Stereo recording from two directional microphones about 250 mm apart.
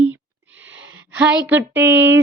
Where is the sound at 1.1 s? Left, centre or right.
Centre.